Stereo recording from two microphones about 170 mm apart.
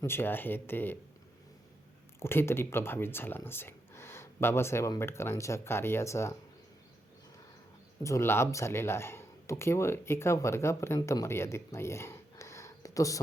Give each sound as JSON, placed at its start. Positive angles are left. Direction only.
{"t": 0.0, "sound": "speech", "side_deg": 15}
{"t": 2.1, "sound": "speech", "side_deg": 15}
{"t": 8.0, "sound": "speech", "side_deg": 15}